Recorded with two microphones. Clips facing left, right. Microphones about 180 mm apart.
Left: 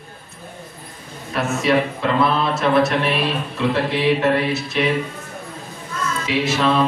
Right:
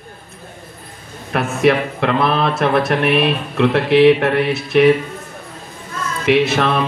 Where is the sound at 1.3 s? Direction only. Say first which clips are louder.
Right 4 dB; 60° right (ahead or behind).